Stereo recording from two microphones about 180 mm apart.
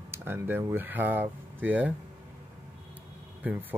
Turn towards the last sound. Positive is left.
turn(degrees=-10)  # may be behind; listen again after turning